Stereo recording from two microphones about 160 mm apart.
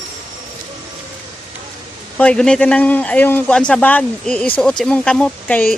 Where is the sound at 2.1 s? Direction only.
5° left (ahead or behind).